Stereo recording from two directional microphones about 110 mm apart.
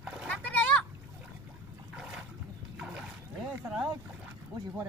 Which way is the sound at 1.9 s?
5° right (ahead or behind).